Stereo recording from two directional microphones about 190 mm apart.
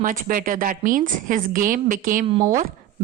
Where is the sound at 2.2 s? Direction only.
30° right (ahead or behind).